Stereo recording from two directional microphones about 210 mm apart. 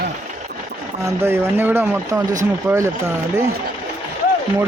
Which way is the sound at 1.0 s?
10° right (ahead or behind).